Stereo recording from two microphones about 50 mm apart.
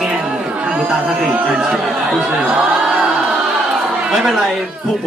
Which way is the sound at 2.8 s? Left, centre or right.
Centre.